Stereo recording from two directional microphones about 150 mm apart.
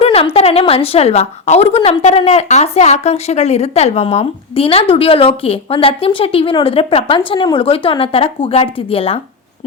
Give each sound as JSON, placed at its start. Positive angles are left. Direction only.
{"t": 0.0, "sound": "a woman's voice", "side_deg": 40}